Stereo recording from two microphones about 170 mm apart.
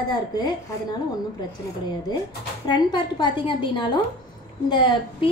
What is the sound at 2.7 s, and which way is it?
A woman's voice, 25° left (ahead or behind).